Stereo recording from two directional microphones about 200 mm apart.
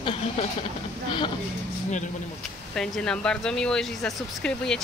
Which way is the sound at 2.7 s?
5° left (ahead or behind).